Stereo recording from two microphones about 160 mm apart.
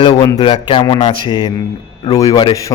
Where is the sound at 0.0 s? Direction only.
25° left (ahead or behind).